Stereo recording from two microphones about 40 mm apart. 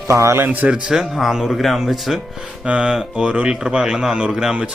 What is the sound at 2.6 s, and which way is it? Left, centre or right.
A man's voice, right.